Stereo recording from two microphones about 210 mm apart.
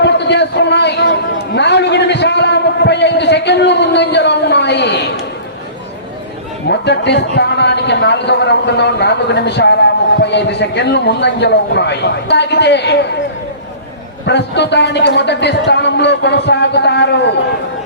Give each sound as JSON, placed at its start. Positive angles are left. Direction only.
{"t": 0.0, "sound": "chatter", "side_deg": 55}
{"t": 6.7, "sound": "a man's voice", "side_deg": 55}
{"t": 14.3, "sound": "a man's voice", "side_deg": 55}